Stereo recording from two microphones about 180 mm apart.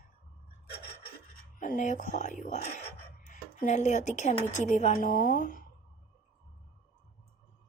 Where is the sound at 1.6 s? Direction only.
45° left (ahead or behind).